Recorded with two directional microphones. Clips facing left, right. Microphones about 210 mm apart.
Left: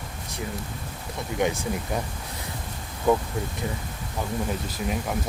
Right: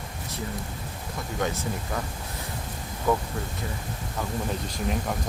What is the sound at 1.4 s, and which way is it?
Speech, 20° left (ahead or behind).